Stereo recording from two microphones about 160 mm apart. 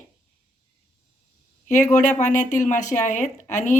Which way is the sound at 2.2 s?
50° left (ahead or behind).